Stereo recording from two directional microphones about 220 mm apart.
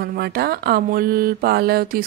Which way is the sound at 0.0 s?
45° right (ahead or behind).